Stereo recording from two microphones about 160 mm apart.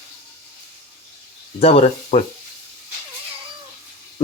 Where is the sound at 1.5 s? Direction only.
40° left (ahead or behind).